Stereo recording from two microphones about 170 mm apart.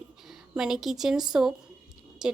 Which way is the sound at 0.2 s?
Centre (ahead or behind).